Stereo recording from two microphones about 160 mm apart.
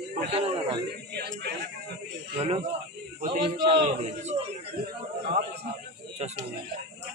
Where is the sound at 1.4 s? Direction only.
90° right.